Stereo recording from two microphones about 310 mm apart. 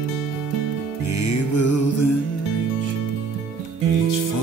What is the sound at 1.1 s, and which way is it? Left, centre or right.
Music, left.